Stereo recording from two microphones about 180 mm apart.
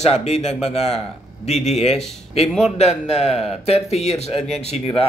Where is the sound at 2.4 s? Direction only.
Centre (ahead or behind).